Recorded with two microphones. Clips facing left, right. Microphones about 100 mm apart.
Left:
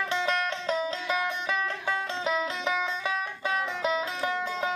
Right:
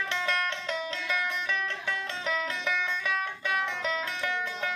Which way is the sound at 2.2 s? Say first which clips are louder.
Left 2 dB; 30° left (ahead or behind).